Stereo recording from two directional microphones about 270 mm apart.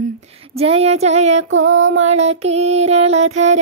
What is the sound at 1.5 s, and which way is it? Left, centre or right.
Female singing, right.